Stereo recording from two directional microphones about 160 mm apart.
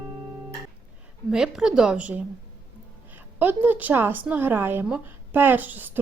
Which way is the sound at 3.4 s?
10° right (ahead or behind).